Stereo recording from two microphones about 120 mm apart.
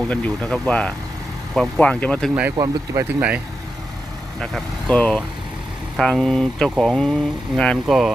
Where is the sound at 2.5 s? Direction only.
30° right (ahead or behind).